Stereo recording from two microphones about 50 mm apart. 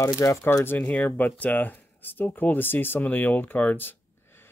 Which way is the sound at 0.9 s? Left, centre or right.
Left.